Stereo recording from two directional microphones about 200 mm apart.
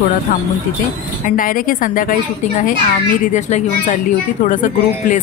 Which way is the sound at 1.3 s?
45° left (ahead or behind).